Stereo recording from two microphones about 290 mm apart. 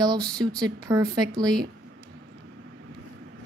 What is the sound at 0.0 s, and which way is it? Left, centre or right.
Speech, centre.